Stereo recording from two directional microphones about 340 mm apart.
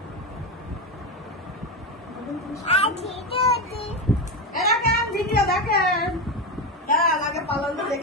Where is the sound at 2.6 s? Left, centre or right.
Centre.